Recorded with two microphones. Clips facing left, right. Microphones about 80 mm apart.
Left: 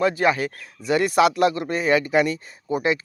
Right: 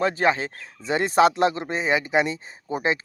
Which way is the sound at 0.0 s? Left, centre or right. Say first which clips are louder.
Left 2 dB; right.